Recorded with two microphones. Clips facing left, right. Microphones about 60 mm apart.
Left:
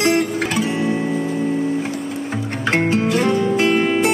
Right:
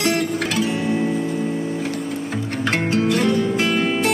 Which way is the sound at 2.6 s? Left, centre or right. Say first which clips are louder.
Left 2 dB; left.